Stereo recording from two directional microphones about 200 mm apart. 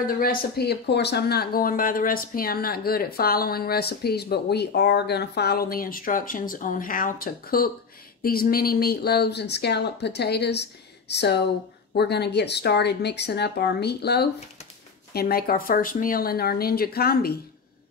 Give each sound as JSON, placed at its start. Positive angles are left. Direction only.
{"t": 0.0, "sound": "speech", "side_deg": 45}